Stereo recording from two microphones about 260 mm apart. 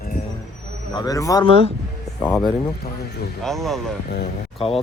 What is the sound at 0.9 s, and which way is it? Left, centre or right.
Speech, centre.